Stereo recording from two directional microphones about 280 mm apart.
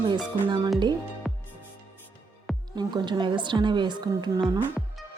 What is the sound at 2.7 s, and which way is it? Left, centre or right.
A woman's voice, centre.